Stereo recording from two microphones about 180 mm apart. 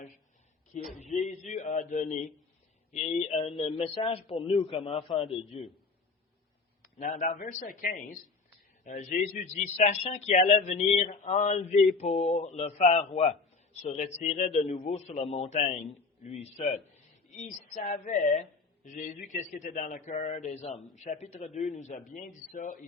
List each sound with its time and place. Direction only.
0.9 s a man's voice: 40° left (ahead or behind)
7.0 s a man's voice: 45° left (ahead or behind)